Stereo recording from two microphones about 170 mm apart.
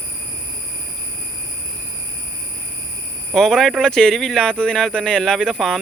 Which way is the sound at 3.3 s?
Centre (ahead or behind).